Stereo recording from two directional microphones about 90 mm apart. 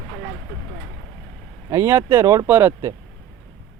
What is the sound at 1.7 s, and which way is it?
Speech, 30° right (ahead or behind).